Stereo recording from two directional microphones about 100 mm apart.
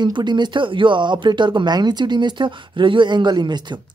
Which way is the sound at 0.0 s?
50° right (ahead or behind).